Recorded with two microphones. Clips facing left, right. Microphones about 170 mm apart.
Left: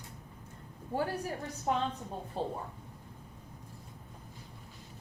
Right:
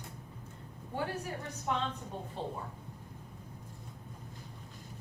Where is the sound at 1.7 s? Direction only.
40° left (ahead or behind).